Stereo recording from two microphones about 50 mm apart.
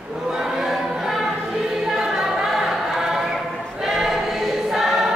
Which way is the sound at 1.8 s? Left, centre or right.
Centre.